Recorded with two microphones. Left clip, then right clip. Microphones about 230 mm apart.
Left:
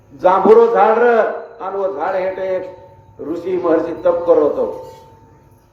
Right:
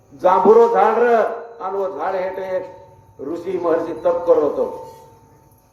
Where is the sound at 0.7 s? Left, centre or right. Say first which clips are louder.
Left 3 dB; right.